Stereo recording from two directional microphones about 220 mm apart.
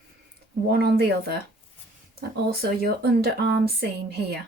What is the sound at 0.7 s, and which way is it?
Speech, 45° right (ahead or behind).